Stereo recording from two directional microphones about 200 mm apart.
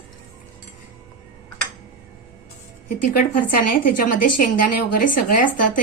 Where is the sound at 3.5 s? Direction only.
45° left (ahead or behind).